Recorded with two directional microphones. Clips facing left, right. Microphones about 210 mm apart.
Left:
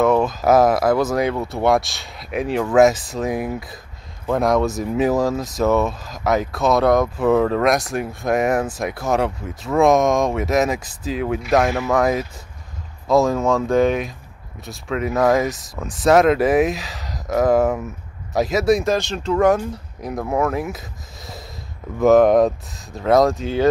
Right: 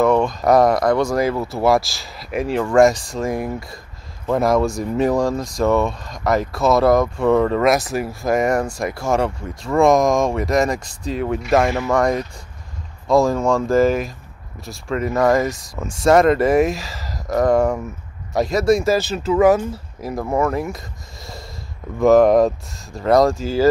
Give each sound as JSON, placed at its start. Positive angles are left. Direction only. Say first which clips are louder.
{"t": 0.0, "sound": "speech", "louder": "right 1 dB", "side_deg": 0}
{"t": 21.9, "sound": "speech", "louder": "right 1 dB", "side_deg": 0}